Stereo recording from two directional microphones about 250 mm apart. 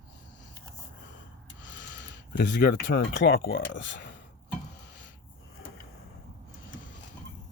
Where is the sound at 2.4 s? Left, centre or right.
Left.